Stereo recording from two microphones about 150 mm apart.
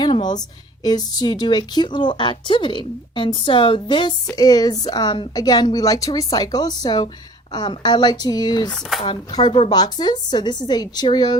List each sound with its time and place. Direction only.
0.0 s a sound: 30° left (ahead or behind)
0.9 s a woman's voice: 25° left (ahead or behind)
8.7 s speech: centre (ahead or behind)
9.0 s a woman's voice: 30° left (ahead or behind)